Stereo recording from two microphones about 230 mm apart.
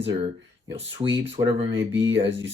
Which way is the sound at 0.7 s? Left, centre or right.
Right.